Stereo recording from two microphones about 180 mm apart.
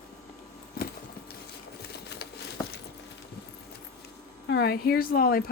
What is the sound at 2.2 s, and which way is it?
Patter, 60° left (ahead or behind).